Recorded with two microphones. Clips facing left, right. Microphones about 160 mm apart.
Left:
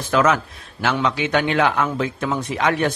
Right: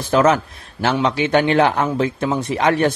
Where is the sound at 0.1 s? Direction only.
35° right (ahead or behind).